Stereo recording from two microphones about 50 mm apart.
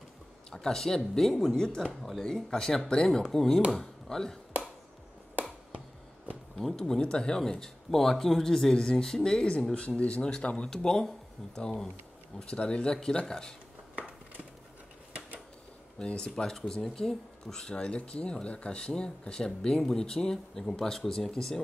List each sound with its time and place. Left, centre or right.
0.5 s speech: centre
6.8 s speech: centre
9.8 s speech: left
10.7 s speech: centre
16.0 s speech: centre